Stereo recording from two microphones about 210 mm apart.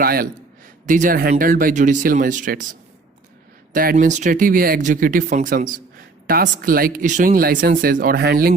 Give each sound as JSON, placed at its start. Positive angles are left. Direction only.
{"t": 0.0, "sound": "a man's voice", "side_deg": -45}
{"t": 3.7, "sound": "speech", "side_deg": -40}